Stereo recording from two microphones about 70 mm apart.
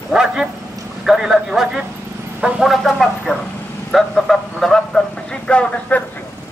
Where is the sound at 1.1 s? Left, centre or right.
Centre.